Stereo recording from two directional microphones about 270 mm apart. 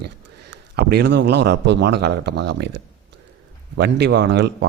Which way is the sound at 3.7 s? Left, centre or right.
Right.